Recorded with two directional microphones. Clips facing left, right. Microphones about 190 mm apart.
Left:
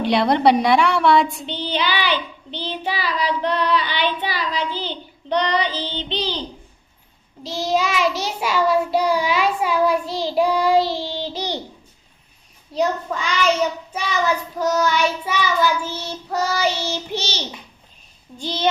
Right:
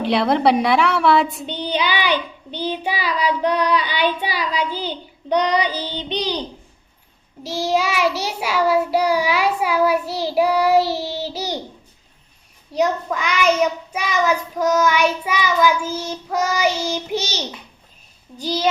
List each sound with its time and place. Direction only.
0.0 s a woman's voice: centre (ahead or behind)
1.5 s child singing: 15° right (ahead or behind)
7.4 s child singing: 10° right (ahead or behind)
12.7 s child singing: 10° right (ahead or behind)
14.6 s child singing: 10° right (ahead or behind)
18.4 s child singing: 5° right (ahead or behind)